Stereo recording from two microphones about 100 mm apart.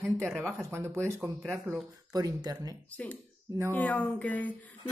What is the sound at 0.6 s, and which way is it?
Speech, 25° right (ahead or behind).